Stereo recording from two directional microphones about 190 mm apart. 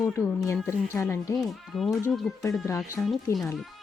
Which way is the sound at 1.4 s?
Centre (ahead or behind).